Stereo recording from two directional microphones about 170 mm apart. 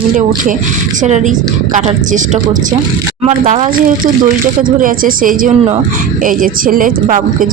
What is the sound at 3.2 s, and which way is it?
Speech, 45° right (ahead or behind).